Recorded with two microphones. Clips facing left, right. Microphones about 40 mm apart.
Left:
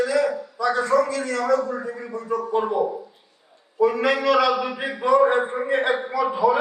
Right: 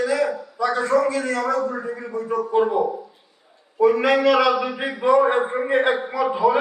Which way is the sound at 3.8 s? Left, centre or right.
Right.